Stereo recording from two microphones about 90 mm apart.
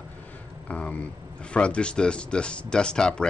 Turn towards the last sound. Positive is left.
turn(degrees=10)  # may be behind; listen again after turning